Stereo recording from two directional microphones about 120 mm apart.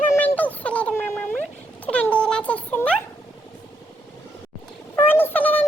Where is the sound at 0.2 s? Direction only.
15° left (ahead or behind).